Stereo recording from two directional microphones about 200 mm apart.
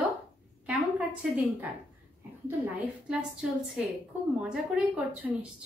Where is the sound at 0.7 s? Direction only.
5° right (ahead or behind).